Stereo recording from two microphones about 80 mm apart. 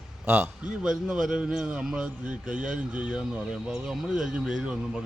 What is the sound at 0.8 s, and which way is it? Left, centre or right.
A man's voice, centre.